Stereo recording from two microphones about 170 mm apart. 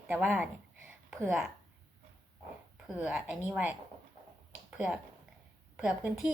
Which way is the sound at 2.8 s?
5° right (ahead or behind).